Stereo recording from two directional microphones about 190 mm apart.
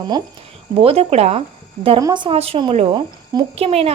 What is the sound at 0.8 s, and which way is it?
A woman's voice, 30° right (ahead or behind).